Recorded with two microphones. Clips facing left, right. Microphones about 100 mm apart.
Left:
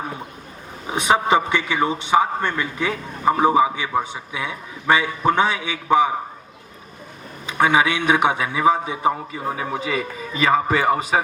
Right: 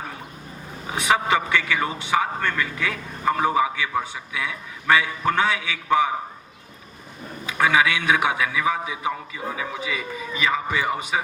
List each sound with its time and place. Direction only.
0.9 s a man's voice: 25° left (ahead or behind)
7.4 s a man's voice: 25° left (ahead or behind); by 11.2 s 40° left (ahead or behind)